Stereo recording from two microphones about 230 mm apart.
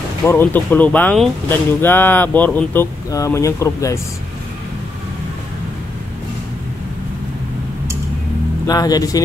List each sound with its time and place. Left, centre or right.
0.2 s speech: centre
8.6 s speech: centre